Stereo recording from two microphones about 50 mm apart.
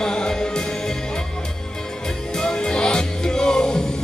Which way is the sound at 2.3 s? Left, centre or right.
Centre.